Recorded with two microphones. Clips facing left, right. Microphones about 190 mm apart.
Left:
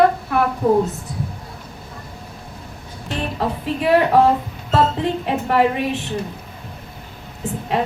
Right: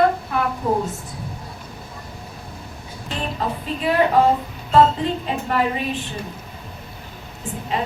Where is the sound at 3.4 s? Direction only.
65° left (ahead or behind).